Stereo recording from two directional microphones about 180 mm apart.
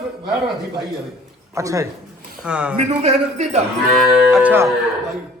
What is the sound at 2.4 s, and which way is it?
Speech, 5° right (ahead or behind).